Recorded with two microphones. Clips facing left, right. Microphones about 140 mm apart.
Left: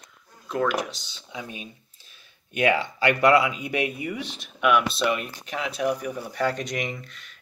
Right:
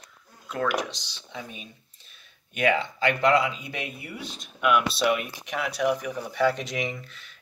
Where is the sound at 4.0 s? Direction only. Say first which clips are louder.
Left 7 dB; 85° left.